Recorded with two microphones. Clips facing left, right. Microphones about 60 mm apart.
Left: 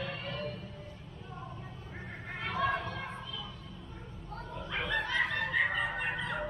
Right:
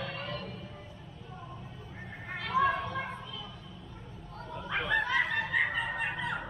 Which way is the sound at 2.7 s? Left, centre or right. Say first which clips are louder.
Right 2 dB; right.